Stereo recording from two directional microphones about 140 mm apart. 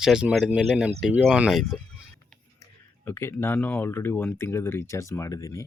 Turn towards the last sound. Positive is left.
turn(degrees=25)  # may be behind; listen again after turning